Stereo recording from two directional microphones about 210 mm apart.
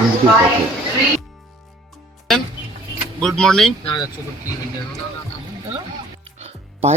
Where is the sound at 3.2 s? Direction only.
Centre (ahead or behind).